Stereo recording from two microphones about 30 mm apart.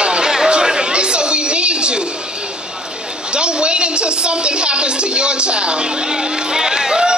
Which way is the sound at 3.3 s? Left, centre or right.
Right.